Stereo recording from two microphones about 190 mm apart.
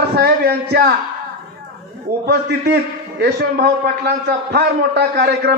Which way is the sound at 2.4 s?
55° right (ahead or behind).